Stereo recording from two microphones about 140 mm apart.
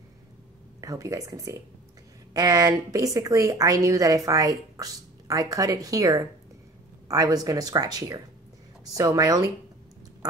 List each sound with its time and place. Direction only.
0.7 s a woman's voice: 20° right (ahead or behind)